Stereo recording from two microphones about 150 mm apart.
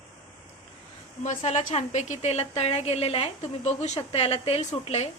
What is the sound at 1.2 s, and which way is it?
A woman's voice, 50° left (ahead or behind).